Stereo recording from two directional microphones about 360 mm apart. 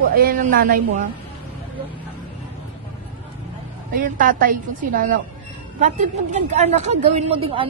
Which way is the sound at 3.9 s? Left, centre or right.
Right.